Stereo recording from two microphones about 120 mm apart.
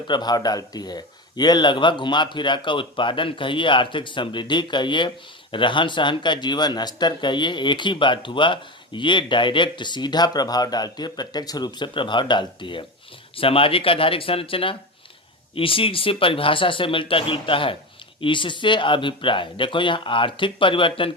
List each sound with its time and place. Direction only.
0.1 s speech: 35° left (ahead or behind)